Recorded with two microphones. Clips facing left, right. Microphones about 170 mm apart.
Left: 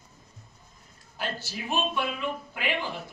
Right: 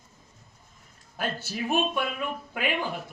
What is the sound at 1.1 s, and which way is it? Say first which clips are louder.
Speech: right 3 dB; 55° right (ahead or behind).